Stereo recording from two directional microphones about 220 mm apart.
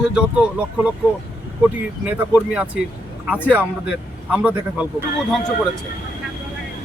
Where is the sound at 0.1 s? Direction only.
5° right (ahead or behind).